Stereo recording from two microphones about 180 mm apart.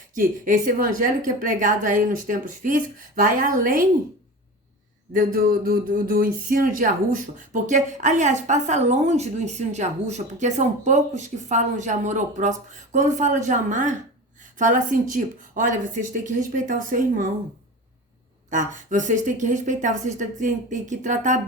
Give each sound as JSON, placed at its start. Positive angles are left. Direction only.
{"t": 0.1, "sound": "speech", "side_deg": -50}
{"t": 5.1, "sound": "speech", "side_deg": -55}
{"t": 18.5, "sound": "speech", "side_deg": -45}